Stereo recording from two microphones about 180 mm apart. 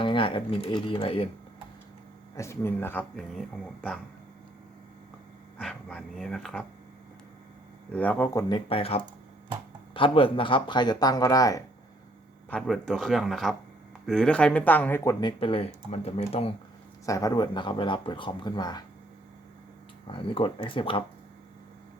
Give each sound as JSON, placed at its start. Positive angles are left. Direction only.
{"t": 0.0, "sound": "speech", "side_deg": 30}
{"t": 2.3, "sound": "speech", "side_deg": 15}
{"t": 5.5, "sound": "speech", "side_deg": 5}
{"t": 7.9, "sound": "speech", "side_deg": 10}
{"t": 12.5, "sound": "speech", "side_deg": 5}
{"t": 15.2, "sound": "speech", "side_deg": 25}
{"t": 17.1, "sound": "speech", "side_deg": 20}
{"t": 20.1, "sound": "speech", "side_deg": 30}